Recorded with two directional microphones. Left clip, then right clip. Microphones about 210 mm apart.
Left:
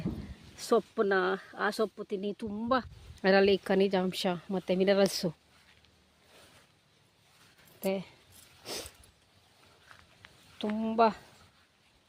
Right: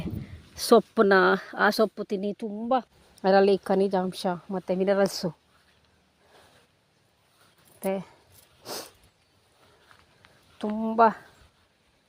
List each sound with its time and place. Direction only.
0.5 s speech: 40° right (ahead or behind)
2.4 s a woman's voice: 5° right (ahead or behind)
7.8 s speech: 15° right (ahead or behind)
8.6 s dog: 20° right (ahead or behind)
10.2 s a sound: 10° right (ahead or behind)
10.6 s speech: 20° right (ahead or behind)